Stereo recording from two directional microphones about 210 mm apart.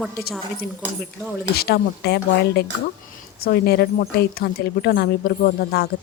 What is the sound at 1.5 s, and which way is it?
A woman's voice, 50° left (ahead or behind).